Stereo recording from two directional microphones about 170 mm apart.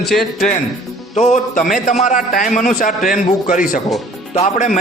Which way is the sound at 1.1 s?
40° left (ahead or behind).